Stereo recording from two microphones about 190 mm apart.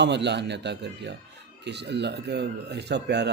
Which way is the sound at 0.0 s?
65° right (ahead or behind).